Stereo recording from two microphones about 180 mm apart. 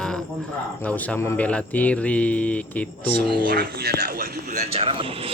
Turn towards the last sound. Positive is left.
turn(degrees=-30)  # may be behind; listen again after turning